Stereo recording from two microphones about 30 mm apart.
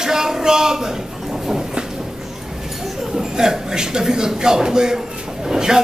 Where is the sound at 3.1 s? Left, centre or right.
Centre.